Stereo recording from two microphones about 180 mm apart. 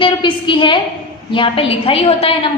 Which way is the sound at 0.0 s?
30° left (ahead or behind).